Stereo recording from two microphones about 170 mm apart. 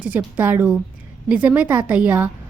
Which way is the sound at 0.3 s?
10° right (ahead or behind).